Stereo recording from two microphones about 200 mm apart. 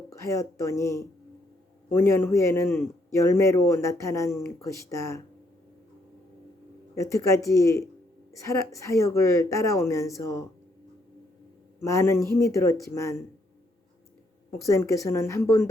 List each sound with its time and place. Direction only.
0.1 s a man's voice: 15° left (ahead or behind)
6.9 s a man's voice: 15° left (ahead or behind)
11.8 s a man's voice: 15° left (ahead or behind)
14.7 s a man's voice: 15° left (ahead or behind)